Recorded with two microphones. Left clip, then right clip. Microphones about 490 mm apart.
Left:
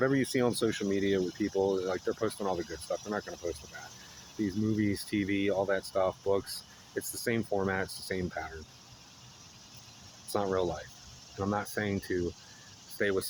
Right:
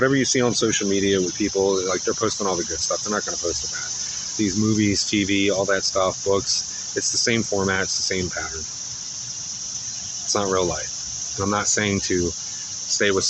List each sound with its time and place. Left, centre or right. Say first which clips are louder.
0.0 s speech: right 9 dB; left
4.8 s speech: right 11 dB; left
10.3 s speech: right 9 dB; left